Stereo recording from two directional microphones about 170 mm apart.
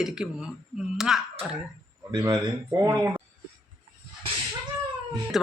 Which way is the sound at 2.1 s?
20° right (ahead or behind).